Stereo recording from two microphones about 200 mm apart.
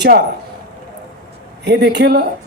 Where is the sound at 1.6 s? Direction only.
55° right (ahead or behind).